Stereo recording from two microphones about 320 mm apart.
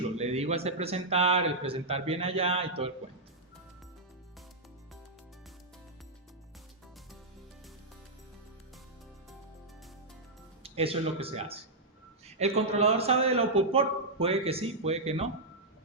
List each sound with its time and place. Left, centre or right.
0.2 s a man's voice: centre
10.6 s a man's voice: centre